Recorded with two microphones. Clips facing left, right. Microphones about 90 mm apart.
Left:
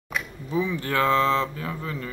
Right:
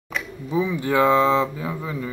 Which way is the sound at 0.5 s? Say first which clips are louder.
Right 4 dB; 15° right (ahead or behind).